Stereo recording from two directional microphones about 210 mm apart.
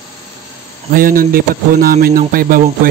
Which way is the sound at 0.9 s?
45° right (ahead or behind).